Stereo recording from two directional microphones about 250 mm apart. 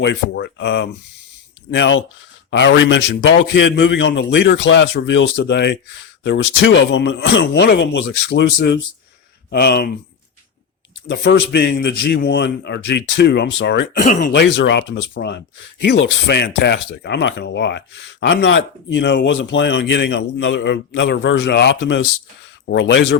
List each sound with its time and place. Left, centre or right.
0.0 s speech: left
11.1 s speech: left